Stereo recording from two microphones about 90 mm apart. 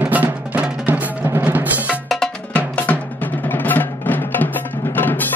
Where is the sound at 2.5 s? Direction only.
15° left (ahead or behind).